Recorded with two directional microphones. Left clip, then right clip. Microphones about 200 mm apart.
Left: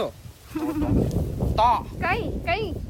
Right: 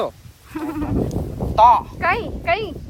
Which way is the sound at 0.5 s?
35° right (ahead or behind).